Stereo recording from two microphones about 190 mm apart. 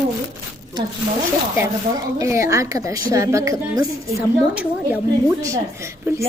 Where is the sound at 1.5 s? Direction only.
15° right (ahead or behind).